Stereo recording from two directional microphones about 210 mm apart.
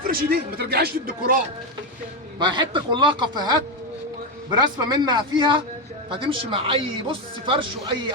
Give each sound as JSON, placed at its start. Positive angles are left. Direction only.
{"t": 0.1, "sound": "speech", "side_deg": -45}
{"t": 2.4, "sound": "speech", "side_deg": -20}
{"t": 4.6, "sound": "speech", "side_deg": -20}